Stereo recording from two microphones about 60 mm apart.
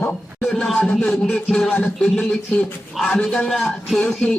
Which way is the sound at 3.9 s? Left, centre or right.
Centre.